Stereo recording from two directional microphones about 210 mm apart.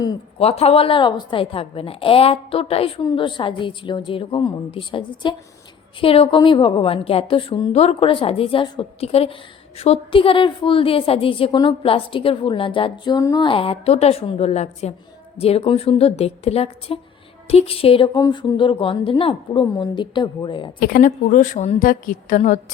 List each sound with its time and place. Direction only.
0.0 s a woman's voice: 25° left (ahead or behind)
20.7 s a woman's voice: 45° left (ahead or behind)